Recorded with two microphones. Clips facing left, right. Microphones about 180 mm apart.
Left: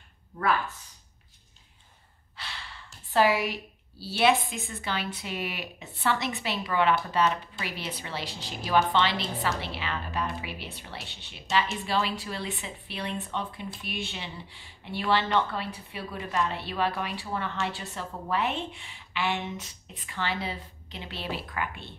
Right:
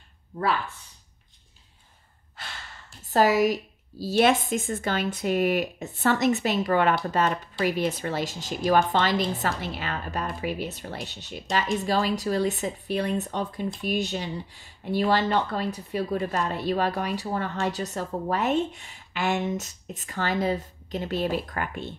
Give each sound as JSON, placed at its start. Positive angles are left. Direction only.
{"t": 2.3, "sound": "speech", "side_deg": -45}